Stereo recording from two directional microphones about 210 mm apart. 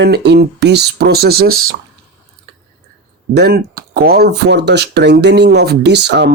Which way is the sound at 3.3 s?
50° right (ahead or behind).